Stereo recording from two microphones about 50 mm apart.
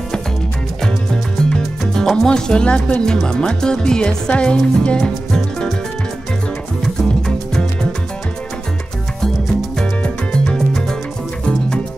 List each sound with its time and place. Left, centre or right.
1.4 s speech: centre
6.8 s music: centre
9.8 s music: centre